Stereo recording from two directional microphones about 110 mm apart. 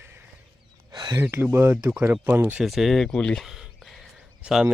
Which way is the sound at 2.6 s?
Centre (ahead or behind).